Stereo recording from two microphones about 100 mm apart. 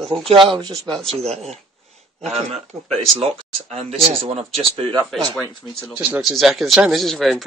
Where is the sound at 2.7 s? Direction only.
30° right (ahead or behind).